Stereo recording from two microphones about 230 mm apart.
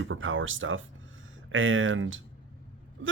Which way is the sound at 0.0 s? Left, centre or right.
Right.